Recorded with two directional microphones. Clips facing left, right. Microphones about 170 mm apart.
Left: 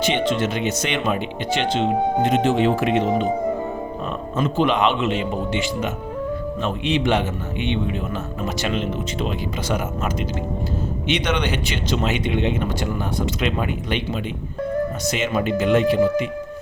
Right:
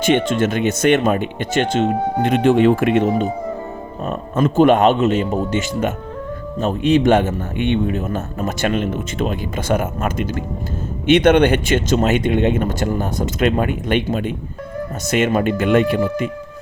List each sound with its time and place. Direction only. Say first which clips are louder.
0.0 s a man's voice: right 4 dB; 50° right (ahead or behind)